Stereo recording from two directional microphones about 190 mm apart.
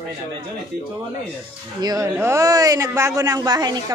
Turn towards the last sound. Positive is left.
turn(degrees=-20)  # may be behind; listen again after turning